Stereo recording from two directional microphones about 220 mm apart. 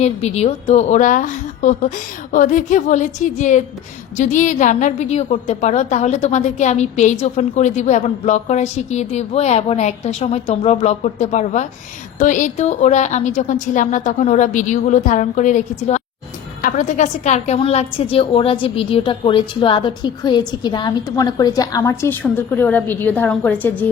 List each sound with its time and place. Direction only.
0.0 s a woman's voice: 30° left (ahead or behind); by 23.8 s 10° left (ahead or behind)